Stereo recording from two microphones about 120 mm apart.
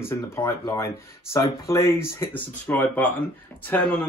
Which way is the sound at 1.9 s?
20° left (ahead or behind).